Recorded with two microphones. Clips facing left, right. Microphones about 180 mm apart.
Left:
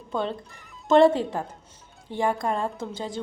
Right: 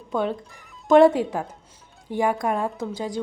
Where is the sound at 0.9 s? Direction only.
10° right (ahead or behind).